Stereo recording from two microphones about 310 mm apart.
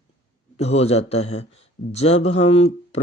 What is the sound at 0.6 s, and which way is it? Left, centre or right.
Speech, centre.